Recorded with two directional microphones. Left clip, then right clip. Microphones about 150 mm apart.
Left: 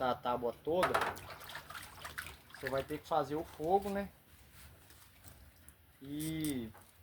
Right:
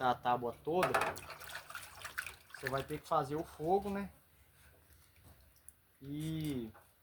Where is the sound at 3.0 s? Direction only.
30° right (ahead or behind).